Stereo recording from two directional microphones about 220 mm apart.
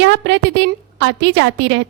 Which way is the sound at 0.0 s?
55° right (ahead or behind).